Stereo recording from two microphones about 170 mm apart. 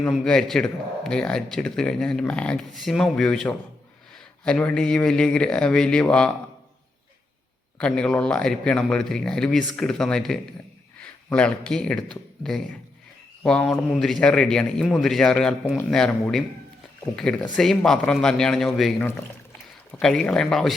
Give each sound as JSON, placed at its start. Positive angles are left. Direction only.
{"t": 0.1, "sound": "speech", "side_deg": 5}
{"t": 7.8, "sound": "speech", "side_deg": 5}